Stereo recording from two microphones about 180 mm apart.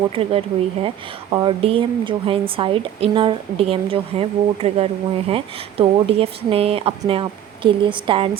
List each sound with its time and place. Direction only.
0.1 s a woman's voice: 35° right (ahead or behind)